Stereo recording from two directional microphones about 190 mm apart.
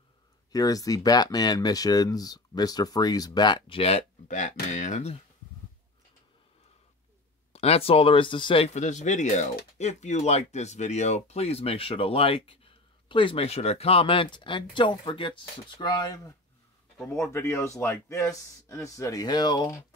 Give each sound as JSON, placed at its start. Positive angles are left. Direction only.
{"t": 0.5, "sound": "speech", "side_deg": 20}
{"t": 4.3, "sound": "speech", "side_deg": 40}
{"t": 7.5, "sound": "speech", "side_deg": 30}